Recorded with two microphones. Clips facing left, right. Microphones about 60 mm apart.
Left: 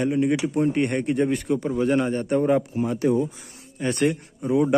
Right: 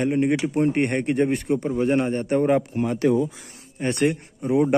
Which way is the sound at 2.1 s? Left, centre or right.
Right.